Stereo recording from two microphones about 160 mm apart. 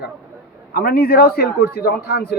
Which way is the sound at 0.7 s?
65° left (ahead or behind).